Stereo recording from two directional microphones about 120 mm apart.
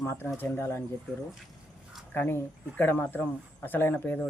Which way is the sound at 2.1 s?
15° left (ahead or behind).